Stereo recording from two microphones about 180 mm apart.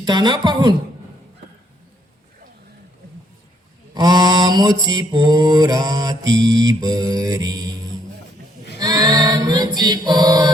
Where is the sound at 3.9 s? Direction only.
20° right (ahead or behind).